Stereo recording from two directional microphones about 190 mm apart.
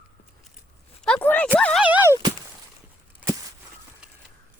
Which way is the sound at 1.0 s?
5° left (ahead or behind).